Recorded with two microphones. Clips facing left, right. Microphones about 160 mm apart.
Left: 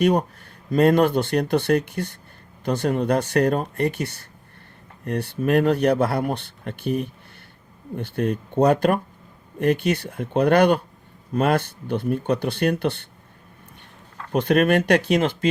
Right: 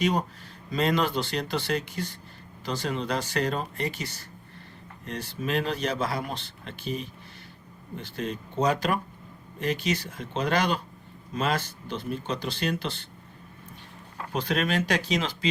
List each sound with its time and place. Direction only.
0.0 s speech: 60° left (ahead or behind)
14.3 s speech: 60° left (ahead or behind)